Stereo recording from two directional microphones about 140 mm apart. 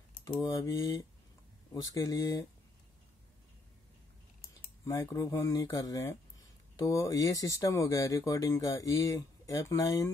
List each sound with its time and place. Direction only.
0.4 s speech: 25° left (ahead or behind)
4.8 s speech: 20° left (ahead or behind)